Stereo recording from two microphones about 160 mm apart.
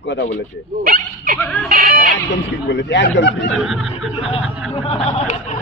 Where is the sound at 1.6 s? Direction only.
65° right (ahead or behind).